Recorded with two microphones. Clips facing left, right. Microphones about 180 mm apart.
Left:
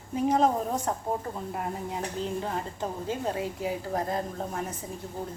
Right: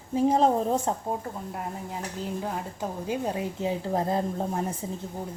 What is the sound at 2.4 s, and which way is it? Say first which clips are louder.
A woman's voice: even; 5° right (ahead or behind).